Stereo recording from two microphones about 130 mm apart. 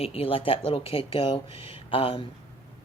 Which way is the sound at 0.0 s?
45° left (ahead or behind).